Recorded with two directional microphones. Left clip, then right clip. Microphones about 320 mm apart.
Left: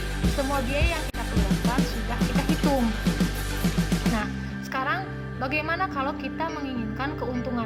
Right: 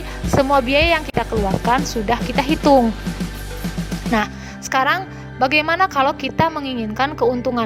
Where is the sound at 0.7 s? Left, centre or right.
Right.